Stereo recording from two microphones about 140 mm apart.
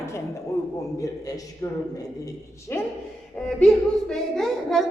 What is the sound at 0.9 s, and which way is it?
A man's voice, 25° left (ahead or behind).